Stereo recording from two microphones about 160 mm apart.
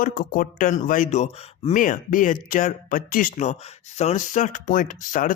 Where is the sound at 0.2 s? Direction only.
60° left (ahead or behind).